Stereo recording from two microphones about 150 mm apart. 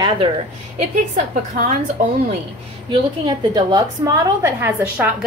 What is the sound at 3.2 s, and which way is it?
A woman's voice, 30° right (ahead or behind).